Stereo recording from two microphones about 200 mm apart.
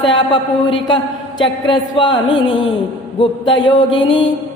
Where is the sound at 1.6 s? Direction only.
25° left (ahead or behind).